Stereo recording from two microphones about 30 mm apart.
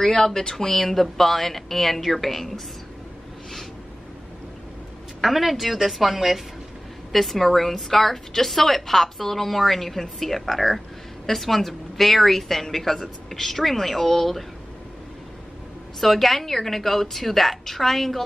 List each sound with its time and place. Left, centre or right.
0.0 s a woman's voice: centre
5.2 s a woman's voice: centre
16.0 s a woman's voice: centre